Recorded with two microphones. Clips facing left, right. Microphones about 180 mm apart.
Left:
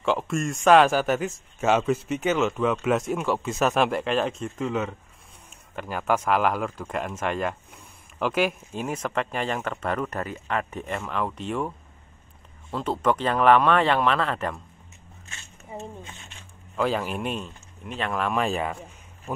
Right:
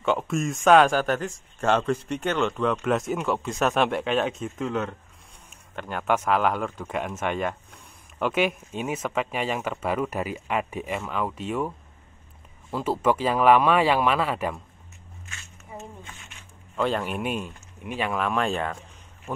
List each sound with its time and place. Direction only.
0.0 s speech: centre (ahead or behind)
12.7 s speech: 5° right (ahead or behind)
15.2 s zipper: 30° left (ahead or behind)
16.0 s a sound: 25° left (ahead or behind)
16.7 s speech: 5° left (ahead or behind)